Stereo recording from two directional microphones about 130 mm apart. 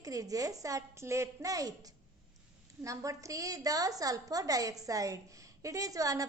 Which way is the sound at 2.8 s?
25° right (ahead or behind).